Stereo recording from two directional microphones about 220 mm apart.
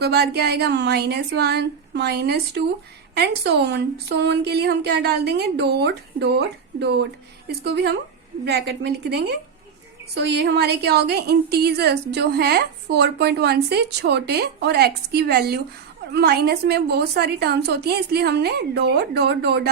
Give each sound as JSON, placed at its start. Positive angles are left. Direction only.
{"t": 0.0, "sound": "a woman's voice", "side_deg": -45}